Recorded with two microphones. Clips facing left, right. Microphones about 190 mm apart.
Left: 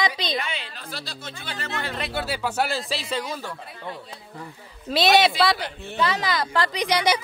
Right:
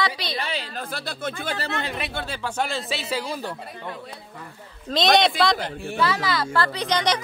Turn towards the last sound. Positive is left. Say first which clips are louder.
# left 1 dB
turn(degrees=10)  # may be behind; listen again after turning